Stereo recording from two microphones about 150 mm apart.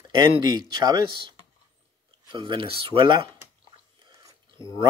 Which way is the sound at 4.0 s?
25° right (ahead or behind).